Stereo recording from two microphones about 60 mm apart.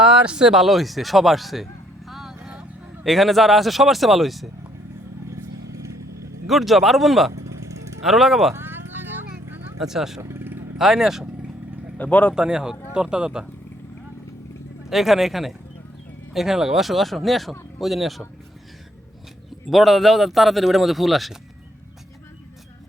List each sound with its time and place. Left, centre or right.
0.0 s speech: centre
2.0 s vehicle: centre
3.0 s speech: centre
5.3 s vehicle: right
6.5 s speech: centre
7.4 s vehicle: right
8.0 s speech: centre
8.5 s vehicle: right
9.8 s speech: centre
11.9 s speech: left
12.3 s speech: centre
14.8 s speech: centre
19.7 s speech: centre